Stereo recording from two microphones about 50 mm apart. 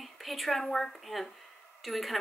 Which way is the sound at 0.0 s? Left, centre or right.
Centre.